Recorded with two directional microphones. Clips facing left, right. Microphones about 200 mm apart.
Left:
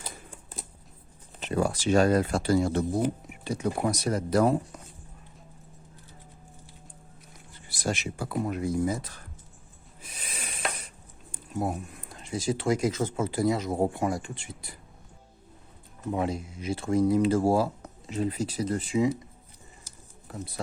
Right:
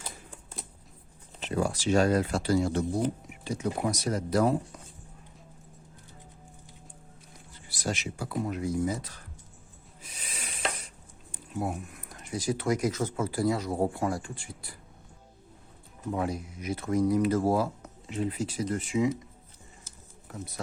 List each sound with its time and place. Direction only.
1.5 s speech: 60° left (ahead or behind)
7.7 s speech: 50° left (ahead or behind)
10.1 s a sound: 55° left (ahead or behind)
11.3 s speech: 40° left (ahead or behind); by 14.8 s 20° left (ahead or behind)
16.1 s speech: 25° left (ahead or behind)